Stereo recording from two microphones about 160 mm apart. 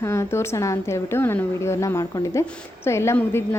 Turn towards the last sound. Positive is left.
turn(degrees=15)  # may be behind; listen again after turning